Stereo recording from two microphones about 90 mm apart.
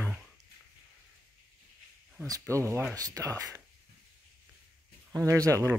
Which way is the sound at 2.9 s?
40° right (ahead or behind).